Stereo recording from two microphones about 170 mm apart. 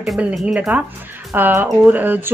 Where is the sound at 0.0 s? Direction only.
Centre (ahead or behind).